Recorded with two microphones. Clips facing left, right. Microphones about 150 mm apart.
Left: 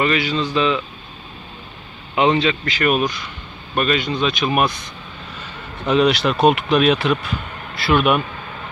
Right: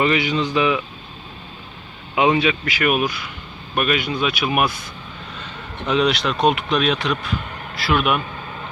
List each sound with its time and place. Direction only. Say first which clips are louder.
0.0 s speech: even; 15° right (ahead or behind)
2.1 s speech: left 1 dB; 10° right (ahead or behind)